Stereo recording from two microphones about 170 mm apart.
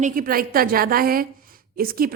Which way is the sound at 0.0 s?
55° right (ahead or behind).